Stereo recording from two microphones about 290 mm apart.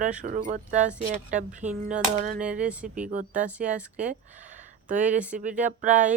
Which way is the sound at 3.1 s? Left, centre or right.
Right.